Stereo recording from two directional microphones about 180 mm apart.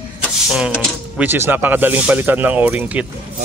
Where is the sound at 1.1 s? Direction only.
10° right (ahead or behind).